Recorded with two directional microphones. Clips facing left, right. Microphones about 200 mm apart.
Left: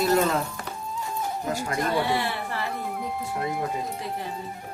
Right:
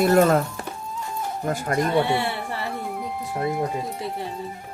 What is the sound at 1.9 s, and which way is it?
Speech, 25° right (ahead or behind).